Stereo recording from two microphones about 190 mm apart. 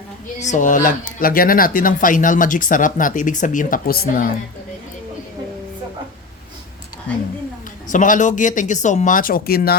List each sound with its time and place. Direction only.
0.3 s speech: 40° left (ahead or behind)
7.9 s speech: 45° left (ahead or behind)